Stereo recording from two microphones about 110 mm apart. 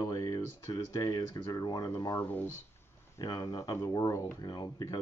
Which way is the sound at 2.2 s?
15° left (ahead or behind).